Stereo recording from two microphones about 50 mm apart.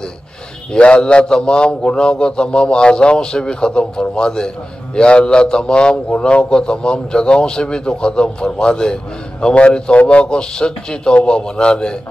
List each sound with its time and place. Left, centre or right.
0.7 s a man's voice: centre